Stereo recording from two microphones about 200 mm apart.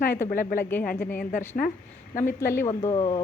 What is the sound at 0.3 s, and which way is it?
Speech, 45° left (ahead or behind).